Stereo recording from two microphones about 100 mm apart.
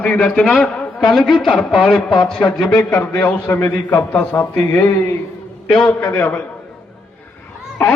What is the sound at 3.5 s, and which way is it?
A man's voice, 25° left (ahead or behind).